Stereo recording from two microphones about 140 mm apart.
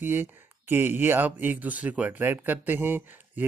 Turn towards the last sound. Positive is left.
turn(degrees=-15)  # may be behind; listen again after turning